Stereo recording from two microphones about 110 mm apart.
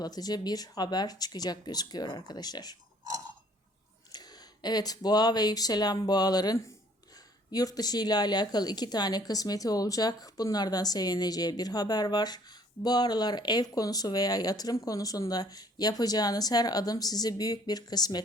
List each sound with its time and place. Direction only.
0.0 s a woman's voice: 35° left (ahead or behind)
4.1 s a woman's voice: 35° left (ahead or behind)